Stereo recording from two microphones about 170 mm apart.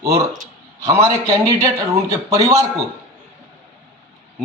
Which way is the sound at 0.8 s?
20° right (ahead or behind).